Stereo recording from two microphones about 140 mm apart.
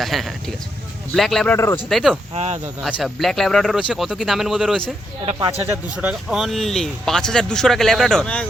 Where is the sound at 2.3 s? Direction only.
45° right (ahead or behind).